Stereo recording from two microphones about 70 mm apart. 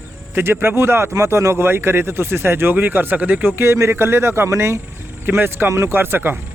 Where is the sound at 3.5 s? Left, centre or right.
Right.